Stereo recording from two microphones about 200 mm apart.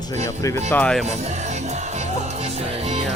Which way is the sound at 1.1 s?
35° right (ahead or behind).